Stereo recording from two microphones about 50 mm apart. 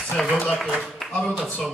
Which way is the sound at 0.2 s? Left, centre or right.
Centre.